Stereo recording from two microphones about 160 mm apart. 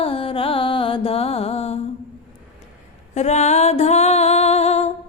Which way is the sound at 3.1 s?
45° left (ahead or behind).